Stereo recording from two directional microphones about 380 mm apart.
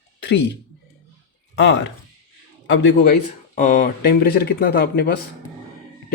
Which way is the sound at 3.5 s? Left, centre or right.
Centre.